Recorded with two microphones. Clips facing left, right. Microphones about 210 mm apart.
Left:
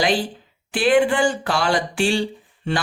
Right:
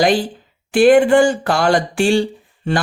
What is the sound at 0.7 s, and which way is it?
Speech, 45° right (ahead or behind).